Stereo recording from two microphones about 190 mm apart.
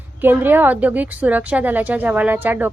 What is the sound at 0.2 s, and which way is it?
A woman's voice, 10° right (ahead or behind).